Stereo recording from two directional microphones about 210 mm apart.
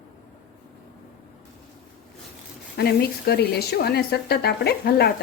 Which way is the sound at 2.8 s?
50° left (ahead or behind).